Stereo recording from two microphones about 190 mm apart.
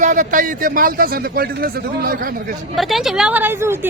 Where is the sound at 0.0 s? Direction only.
40° right (ahead or behind).